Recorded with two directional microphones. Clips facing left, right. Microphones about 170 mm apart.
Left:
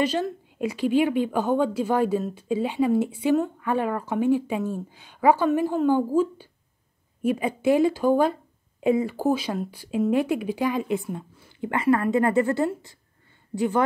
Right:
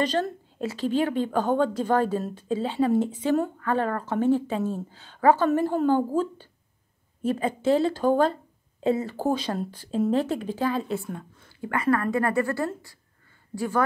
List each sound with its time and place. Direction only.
0.0 s a woman's voice: 10° left (ahead or behind)